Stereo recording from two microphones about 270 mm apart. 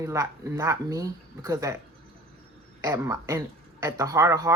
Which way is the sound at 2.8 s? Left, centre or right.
Centre.